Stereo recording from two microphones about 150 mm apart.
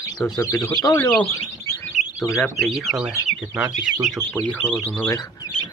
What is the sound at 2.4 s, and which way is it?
Speech, centre (ahead or behind).